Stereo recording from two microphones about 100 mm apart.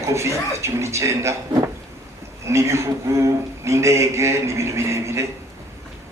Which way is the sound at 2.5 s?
30° right (ahead or behind).